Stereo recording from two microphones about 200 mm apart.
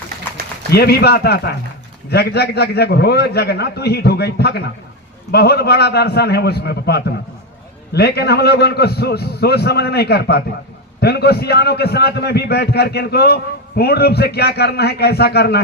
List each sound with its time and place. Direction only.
0.7 s a man's voice: 50° left (ahead or behind)